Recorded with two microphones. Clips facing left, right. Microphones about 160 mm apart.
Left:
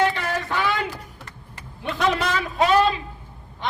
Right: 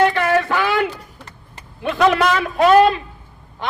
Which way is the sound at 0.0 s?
65° right (ahead or behind).